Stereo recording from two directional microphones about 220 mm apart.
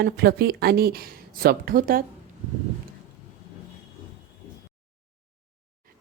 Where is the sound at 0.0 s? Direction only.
45° right (ahead or behind).